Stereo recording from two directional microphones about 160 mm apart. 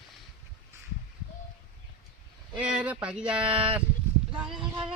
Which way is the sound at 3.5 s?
35° right (ahead or behind).